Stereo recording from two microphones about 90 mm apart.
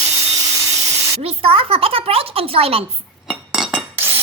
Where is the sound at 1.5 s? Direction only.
90° right.